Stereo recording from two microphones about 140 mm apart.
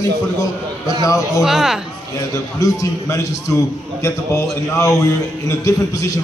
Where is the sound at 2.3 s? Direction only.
25° left (ahead or behind).